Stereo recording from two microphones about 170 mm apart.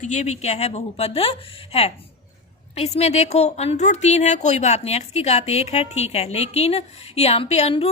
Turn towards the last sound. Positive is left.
turn(degrees=35)  # may be behind; listen again after turning